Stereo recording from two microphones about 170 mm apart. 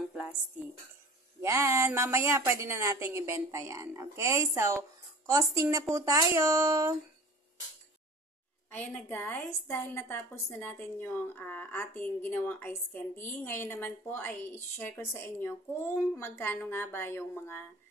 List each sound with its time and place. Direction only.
1.4 s a woman's voice: 15° right (ahead or behind)
8.7 s a woman's voice: 10° left (ahead or behind)